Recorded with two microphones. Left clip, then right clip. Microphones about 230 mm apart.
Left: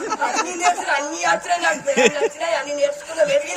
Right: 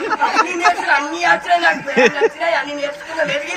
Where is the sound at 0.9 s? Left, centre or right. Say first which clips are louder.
Right 5 dB; left.